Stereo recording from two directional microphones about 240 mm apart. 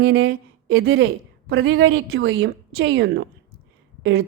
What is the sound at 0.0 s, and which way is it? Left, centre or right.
A woman's voice, right.